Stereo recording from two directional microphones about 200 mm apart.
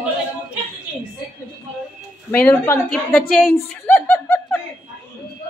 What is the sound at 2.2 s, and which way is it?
A woman's voice, 10° left (ahead or behind).